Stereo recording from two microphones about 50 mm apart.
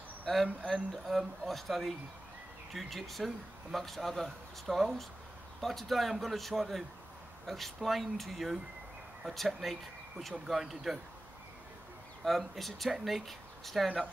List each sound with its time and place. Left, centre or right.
0.3 s speech: centre
12.3 s speech: centre